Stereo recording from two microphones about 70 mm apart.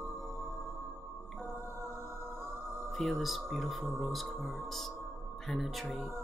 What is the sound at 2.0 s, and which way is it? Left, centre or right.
Music, right.